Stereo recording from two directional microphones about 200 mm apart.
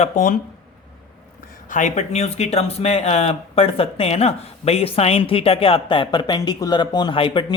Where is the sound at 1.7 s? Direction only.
35° left (ahead or behind).